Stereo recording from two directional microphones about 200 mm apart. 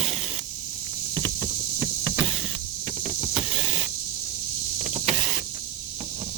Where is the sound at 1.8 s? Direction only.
20° right (ahead or behind).